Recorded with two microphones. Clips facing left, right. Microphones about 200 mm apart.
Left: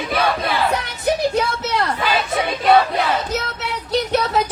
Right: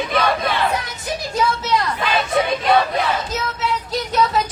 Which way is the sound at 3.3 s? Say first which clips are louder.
Right 1 dB; 65° left (ahead or behind).